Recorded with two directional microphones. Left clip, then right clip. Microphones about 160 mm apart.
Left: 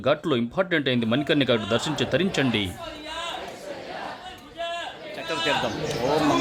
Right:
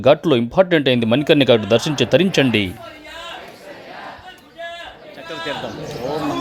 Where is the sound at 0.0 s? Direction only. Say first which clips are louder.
Right 9 dB; 30° right (ahead or behind).